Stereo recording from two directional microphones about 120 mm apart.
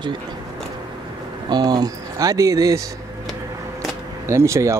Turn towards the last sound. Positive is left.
turn(degrees=-25)  # may be behind; listen again after turning